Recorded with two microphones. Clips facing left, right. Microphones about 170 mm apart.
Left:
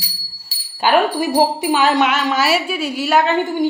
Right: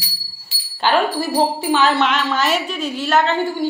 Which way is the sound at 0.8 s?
15° left (ahead or behind).